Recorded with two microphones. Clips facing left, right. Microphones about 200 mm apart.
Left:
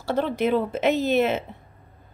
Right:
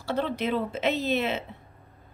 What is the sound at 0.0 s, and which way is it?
A woman's voice, 50° left (ahead or behind).